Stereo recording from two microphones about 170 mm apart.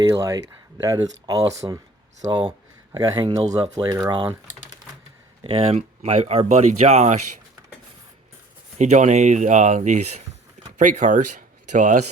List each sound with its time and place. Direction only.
0.1 s speech: 15° right (ahead or behind)
2.9 s speech: 25° right (ahead or behind)
5.4 s speech: 35° right (ahead or behind)
8.8 s speech: 45° right (ahead or behind)